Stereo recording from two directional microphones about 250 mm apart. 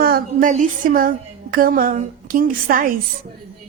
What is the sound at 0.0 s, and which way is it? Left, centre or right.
Speech, right.